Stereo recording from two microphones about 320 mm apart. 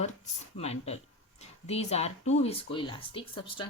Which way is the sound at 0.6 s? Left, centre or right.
Centre.